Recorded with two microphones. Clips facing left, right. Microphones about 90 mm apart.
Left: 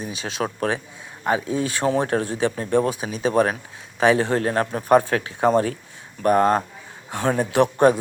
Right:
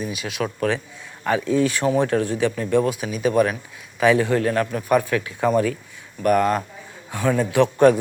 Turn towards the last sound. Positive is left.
turn(degrees=25)  # may be behind; listen again after turning